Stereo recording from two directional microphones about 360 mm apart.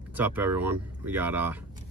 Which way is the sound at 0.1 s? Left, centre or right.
Centre.